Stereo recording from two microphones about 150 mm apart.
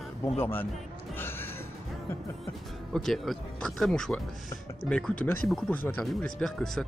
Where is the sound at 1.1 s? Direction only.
15° left (ahead or behind).